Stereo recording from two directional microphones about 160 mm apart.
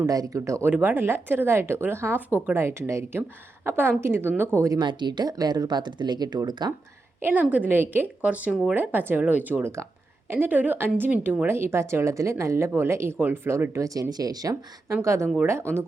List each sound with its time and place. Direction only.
0.0 s speech: 20° right (ahead or behind)
7.2 s a woman's voice: 15° right (ahead or behind)